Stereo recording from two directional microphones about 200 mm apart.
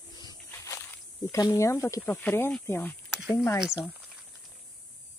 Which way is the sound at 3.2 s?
5° right (ahead or behind).